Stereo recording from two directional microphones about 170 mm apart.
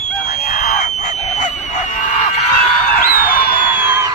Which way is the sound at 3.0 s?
55° left (ahead or behind).